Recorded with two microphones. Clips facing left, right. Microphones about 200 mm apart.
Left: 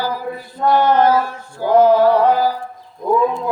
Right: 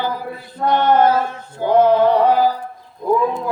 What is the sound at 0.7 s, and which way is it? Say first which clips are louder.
Mantra: left 1 dB; 20° right (ahead or behind).